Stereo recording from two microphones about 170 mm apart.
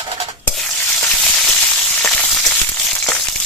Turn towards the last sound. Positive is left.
turn(degrees=5)  # may be behind; listen again after turning